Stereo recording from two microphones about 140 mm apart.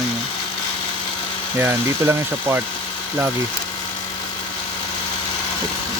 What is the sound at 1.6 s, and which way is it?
Speech, 15° right (ahead or behind).